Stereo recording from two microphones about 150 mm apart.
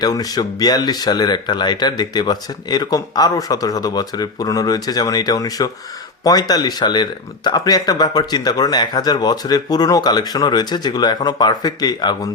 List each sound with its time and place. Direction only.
0.0 s speech: 25° left (ahead or behind)